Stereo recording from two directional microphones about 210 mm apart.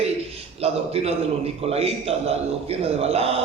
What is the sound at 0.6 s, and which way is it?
A man's voice, 30° right (ahead or behind).